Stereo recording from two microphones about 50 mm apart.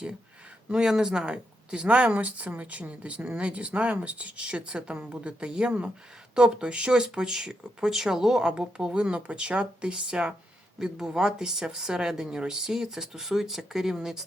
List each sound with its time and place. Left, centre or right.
0.7 s speech: centre
1.9 s speech: right; by 14.3 s centre